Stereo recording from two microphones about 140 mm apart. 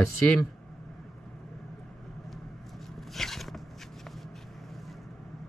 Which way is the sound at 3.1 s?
Centre (ahead or behind).